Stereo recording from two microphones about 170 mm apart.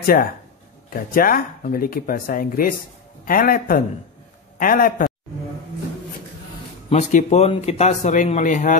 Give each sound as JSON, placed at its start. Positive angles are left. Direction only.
{"t": 0.0, "sound": "speech", "side_deg": 60}
{"t": 6.9, "sound": "speech", "side_deg": 45}